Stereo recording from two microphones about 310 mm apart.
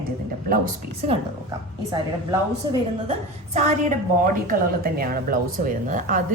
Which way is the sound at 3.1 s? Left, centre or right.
Right.